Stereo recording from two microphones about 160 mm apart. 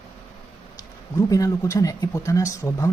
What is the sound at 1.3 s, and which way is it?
Speech, 20° left (ahead or behind).